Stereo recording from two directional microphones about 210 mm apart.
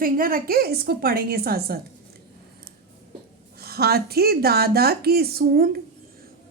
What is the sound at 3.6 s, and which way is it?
A woman's voice, 50° right (ahead or behind).